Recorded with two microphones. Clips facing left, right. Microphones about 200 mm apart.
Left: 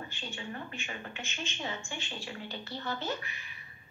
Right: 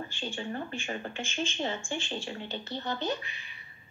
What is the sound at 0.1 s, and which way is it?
A woman's voice, 30° right (ahead or behind).